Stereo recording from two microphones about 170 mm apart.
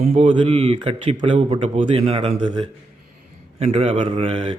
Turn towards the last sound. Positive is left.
turn(degrees=-35)  # may be behind; listen again after turning